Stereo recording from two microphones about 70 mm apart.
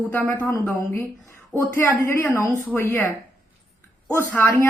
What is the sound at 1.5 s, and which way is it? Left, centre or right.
Speech, right.